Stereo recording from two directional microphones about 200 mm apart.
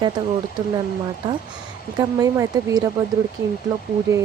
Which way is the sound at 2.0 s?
15° right (ahead or behind).